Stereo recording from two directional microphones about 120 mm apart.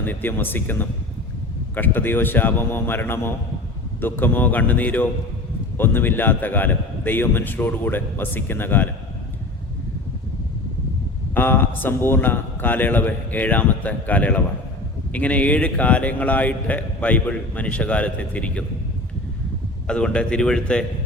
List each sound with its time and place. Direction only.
0.0 s a man's voice: 15° left (ahead or behind)
11.3 s a man's voice: 15° left (ahead or behind)
19.9 s a man's voice: 10° left (ahead or behind)